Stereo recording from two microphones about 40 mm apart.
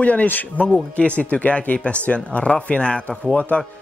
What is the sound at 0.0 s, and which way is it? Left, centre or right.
Speech, left.